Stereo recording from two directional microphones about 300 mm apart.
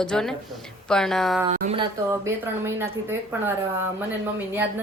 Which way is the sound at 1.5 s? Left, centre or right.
Right.